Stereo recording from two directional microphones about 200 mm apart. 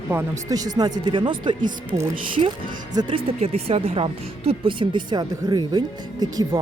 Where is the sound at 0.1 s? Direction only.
15° right (ahead or behind).